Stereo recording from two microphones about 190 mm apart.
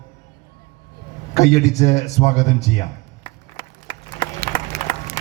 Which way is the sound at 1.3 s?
35° left (ahead or behind).